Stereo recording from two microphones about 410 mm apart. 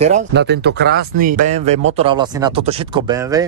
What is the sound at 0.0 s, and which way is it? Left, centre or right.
Speech, right.